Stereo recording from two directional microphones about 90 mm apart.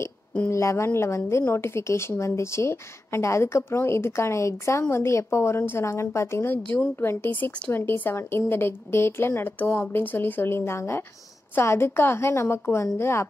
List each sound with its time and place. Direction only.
0.5 s a woman's voice: 35° left (ahead or behind)